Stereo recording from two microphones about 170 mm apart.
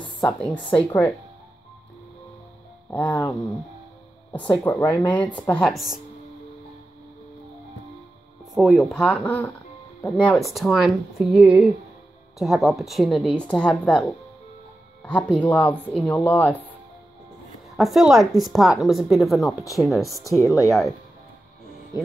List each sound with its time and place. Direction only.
0.7 s speech: 10° left (ahead or behind)
2.9 s speech: 10° left (ahead or behind)
4.6 s a woman's voice: 10° left (ahead or behind)
8.5 s a woman's voice: centre (ahead or behind)
15.0 s speech: 5° left (ahead or behind)
17.7 s a woman's voice: centre (ahead or behind)
20.2 s speech: 20° left (ahead or behind)